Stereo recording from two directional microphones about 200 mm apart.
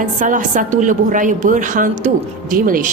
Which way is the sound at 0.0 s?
40° right (ahead or behind).